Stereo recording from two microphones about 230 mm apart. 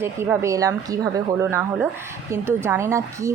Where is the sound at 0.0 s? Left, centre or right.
Centre.